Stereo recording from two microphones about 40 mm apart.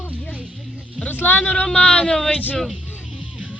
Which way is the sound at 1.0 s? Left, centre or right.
Left.